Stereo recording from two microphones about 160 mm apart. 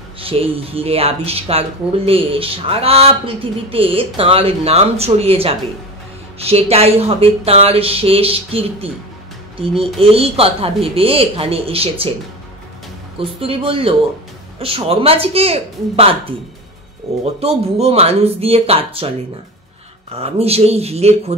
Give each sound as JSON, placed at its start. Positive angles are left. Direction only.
{"t": 0.2, "sound": "speech", "side_deg": -35}
{"t": 9.9, "sound": "speech", "side_deg": -35}
{"t": 13.2, "sound": "speech", "side_deg": -35}
{"t": 17.4, "sound": "speech", "side_deg": -40}
{"t": 20.2, "sound": "speech", "side_deg": -40}